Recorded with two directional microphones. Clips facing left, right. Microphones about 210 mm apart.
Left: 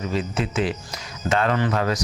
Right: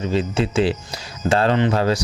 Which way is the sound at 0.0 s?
30° right (ahead or behind).